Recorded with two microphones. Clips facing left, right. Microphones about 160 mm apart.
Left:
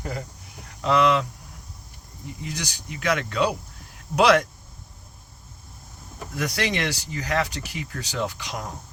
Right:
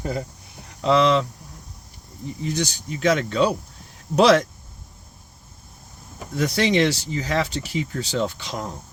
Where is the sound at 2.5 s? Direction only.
25° right (ahead or behind).